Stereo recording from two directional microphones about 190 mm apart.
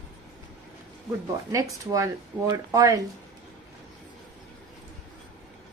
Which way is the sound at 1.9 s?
15° right (ahead or behind).